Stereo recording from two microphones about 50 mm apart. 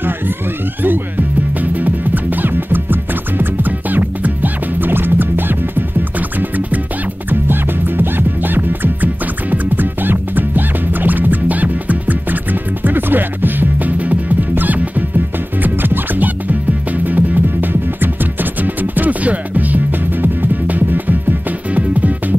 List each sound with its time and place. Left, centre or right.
1.6 s music: right